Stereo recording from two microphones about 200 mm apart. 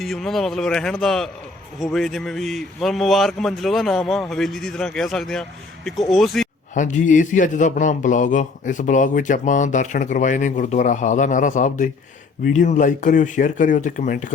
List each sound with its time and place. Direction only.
0.0 s speech: centre (ahead or behind)
6.7 s a man's voice: 40° left (ahead or behind)